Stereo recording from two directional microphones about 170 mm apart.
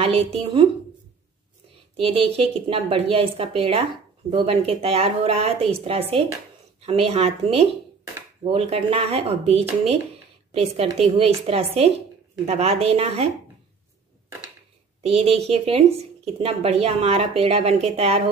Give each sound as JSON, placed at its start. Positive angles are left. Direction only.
{"t": 0.0, "sound": "speech", "side_deg": -35}
{"t": 2.0, "sound": "speech", "side_deg": -35}
{"t": 15.0, "sound": "speech", "side_deg": -35}